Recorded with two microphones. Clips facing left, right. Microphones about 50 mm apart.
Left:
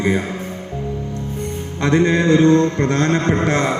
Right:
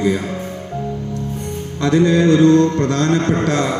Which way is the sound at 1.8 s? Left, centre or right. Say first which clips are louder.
Right 2 dB; left.